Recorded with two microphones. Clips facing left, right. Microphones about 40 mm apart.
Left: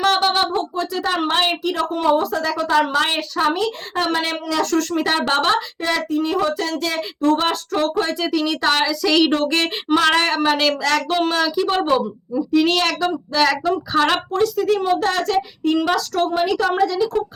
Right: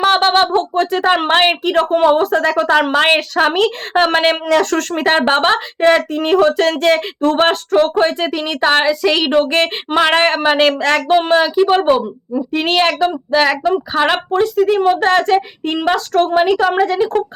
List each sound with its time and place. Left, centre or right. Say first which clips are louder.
0.2 s speech: right 6 dB; right